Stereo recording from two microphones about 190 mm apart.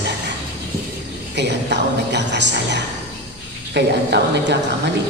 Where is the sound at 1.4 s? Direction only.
65° right (ahead or behind).